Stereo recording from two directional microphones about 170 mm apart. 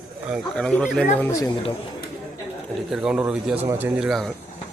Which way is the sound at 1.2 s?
20° left (ahead or behind).